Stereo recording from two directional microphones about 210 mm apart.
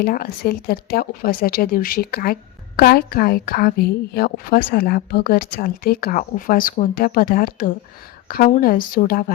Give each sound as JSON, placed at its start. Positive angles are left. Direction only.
{"t": 0.0, "sound": "speech", "side_deg": 45}